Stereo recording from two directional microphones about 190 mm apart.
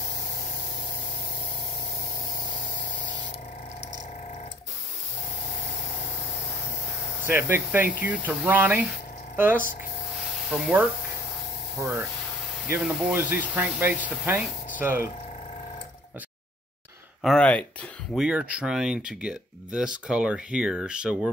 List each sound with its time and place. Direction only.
7.2 s speech: 10° right (ahead or behind)
10.5 s speech: 5° right (ahead or behind)
17.2 s speech: 5° left (ahead or behind)
18.1 s speech: 5° right (ahead or behind)